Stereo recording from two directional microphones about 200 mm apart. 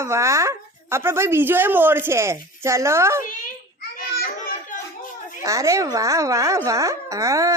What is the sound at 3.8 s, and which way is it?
Children playing, 50° left (ahead or behind).